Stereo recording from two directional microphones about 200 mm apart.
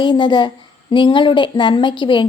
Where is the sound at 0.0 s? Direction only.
25° left (ahead or behind).